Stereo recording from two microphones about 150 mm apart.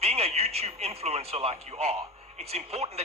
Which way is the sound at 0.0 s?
45° right (ahead or behind).